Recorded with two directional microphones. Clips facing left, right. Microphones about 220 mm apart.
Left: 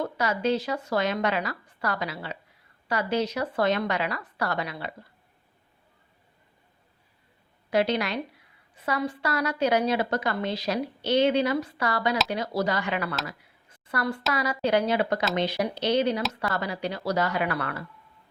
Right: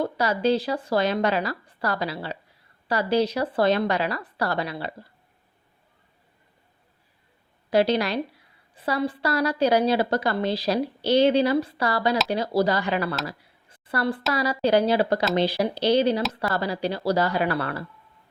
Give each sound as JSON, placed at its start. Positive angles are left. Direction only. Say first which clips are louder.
{"t": 0.0, "sound": "a woman's voice", "louder": "right 3 dB", "side_deg": -35}
{"t": 7.7, "sound": "a woman's voice", "louder": "right 4 dB", "side_deg": -35}
{"t": 13.2, "sound": "a sound", "louder": "right 4 dB", "side_deg": -30}
{"t": 14.3, "sound": "a woman's voice", "louder": "right 4 dB", "side_deg": -35}